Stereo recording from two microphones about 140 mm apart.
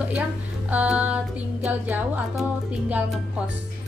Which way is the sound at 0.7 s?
10° right (ahead or behind).